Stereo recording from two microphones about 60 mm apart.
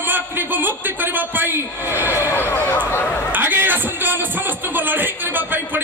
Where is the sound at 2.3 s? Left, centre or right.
Left.